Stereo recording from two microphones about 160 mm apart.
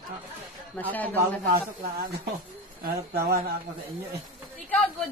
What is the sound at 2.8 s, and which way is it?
Speech, 70° right (ahead or behind).